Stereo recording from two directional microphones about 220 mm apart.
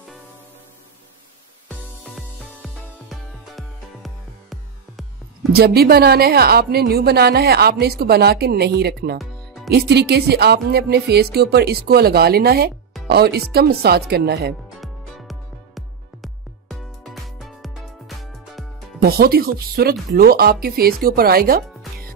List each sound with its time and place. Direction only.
1.7 s music: centre (ahead or behind)
5.5 s speech: 45° right (ahead or behind)
14.8 s music: centre (ahead or behind)
19.0 s speech: 45° right (ahead or behind)